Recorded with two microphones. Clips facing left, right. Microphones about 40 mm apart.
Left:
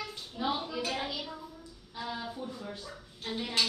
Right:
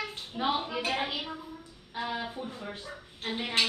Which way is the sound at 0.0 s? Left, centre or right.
Right.